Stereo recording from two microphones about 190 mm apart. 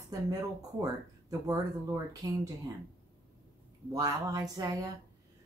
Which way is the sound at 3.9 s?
20° right (ahead or behind).